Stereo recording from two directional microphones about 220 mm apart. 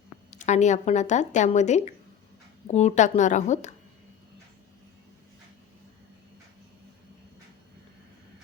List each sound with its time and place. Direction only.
0.3 s speech: 30° left (ahead or behind)